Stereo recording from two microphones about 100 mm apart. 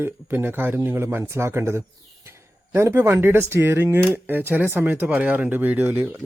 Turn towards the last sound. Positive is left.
turn(degrees=-20)  # may be behind; listen again after turning